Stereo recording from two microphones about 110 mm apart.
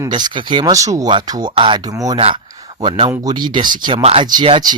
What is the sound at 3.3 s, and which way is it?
Speech, 40° right (ahead or behind).